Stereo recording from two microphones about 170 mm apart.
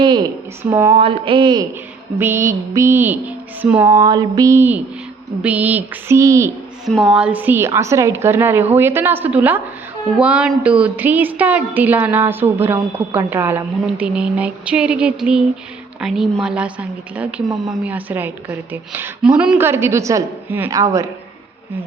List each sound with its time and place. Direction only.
0.0 s speech: 25° right (ahead or behind)
0.6 s a woman's voice: 15° right (ahead or behind)
0.9 s speech: 30° right (ahead or behind)
2.1 s a woman's voice: 15° right (ahead or behind)
6.8 s a woman's voice: centre (ahead or behind); by 21.1 s 20° right (ahead or behind)